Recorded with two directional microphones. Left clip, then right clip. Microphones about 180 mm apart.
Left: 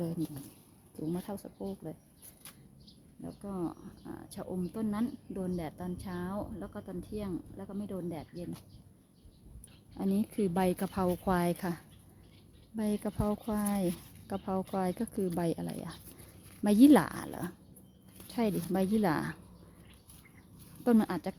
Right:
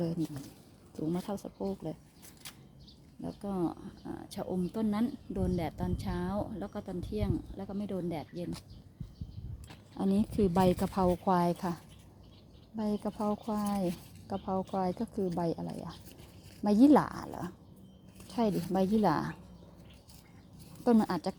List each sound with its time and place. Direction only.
0.0 s speech: 5° right (ahead or behind)
3.2 s speech: 20° right (ahead or behind)
10.0 s speech: 5° right (ahead or behind)
20.8 s speech: 5° left (ahead or behind)